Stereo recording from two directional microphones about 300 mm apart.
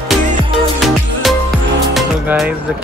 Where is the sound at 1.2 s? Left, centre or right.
Centre.